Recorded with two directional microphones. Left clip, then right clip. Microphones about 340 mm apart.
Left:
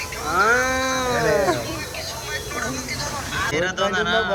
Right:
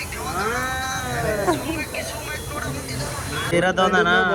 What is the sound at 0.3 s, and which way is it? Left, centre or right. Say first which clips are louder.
Cat: left 7 dB; centre.